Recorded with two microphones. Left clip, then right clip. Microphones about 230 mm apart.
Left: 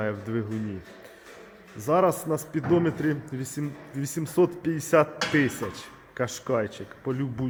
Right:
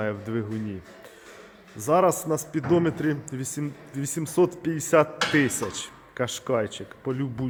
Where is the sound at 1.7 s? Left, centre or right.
Centre.